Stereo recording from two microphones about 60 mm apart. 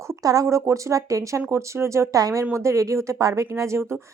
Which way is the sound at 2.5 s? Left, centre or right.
Right.